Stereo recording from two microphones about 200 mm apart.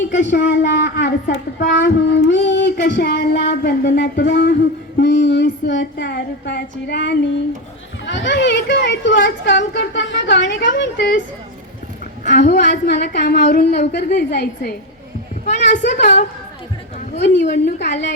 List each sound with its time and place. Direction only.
0.1 s a woman's voice: 60° left (ahead or behind)
12.2 s a woman's voice: 35° left (ahead or behind)
12.5 s a woman's voice: 55° left (ahead or behind)
15.9 s a woman's voice: 55° left (ahead or behind)
17.4 s a woman's voice: 35° left (ahead or behind)
17.7 s a woman's voice: 55° left (ahead or behind)